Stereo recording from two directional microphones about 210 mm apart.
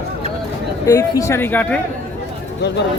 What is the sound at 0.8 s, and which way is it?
Speech, 15° left (ahead or behind).